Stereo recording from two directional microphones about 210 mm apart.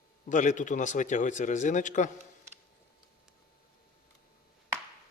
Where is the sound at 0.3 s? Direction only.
35° left (ahead or behind).